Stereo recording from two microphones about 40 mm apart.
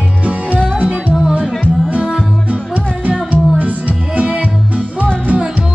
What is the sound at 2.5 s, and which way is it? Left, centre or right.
Music, right.